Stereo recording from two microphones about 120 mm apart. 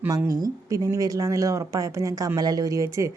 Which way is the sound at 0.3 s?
30° right (ahead or behind).